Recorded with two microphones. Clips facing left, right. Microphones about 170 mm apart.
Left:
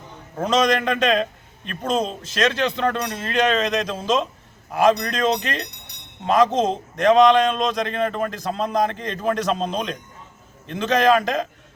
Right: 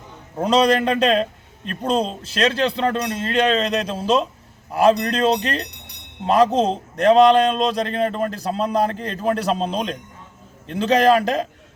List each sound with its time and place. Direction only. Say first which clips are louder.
0.3 s a man's voice: right 3 dB; 30° right (ahead or behind)